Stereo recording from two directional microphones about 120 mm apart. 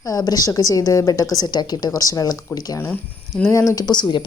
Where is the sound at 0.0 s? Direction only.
30° left (ahead or behind).